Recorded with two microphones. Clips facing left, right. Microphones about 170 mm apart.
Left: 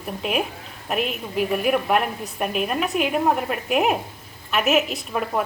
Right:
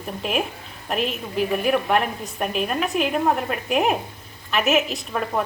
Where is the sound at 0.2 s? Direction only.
Centre (ahead or behind).